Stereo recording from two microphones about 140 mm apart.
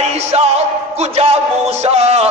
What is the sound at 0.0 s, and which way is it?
Music, 50° right (ahead or behind).